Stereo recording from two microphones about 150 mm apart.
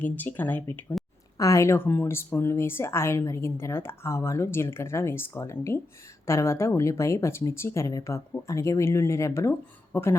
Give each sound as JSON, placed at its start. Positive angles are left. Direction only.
{"t": 0.0, "sound": "speech", "side_deg": 10}
{"t": 0.9, "sound": "a sound", "side_deg": 0}
{"t": 1.4, "sound": "speech", "side_deg": 20}